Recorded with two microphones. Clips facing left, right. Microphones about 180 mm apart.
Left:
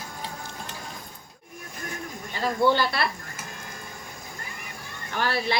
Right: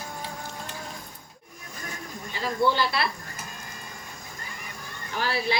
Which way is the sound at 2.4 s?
50° left (ahead or behind).